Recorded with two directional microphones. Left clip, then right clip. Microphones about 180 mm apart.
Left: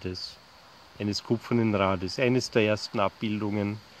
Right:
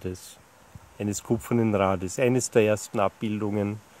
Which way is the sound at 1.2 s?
45° right (ahead or behind).